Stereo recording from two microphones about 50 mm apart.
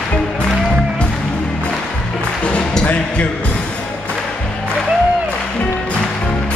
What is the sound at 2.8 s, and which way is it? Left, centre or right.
Speech, left.